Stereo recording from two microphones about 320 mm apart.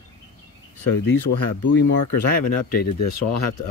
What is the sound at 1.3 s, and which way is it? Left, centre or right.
Speech, left.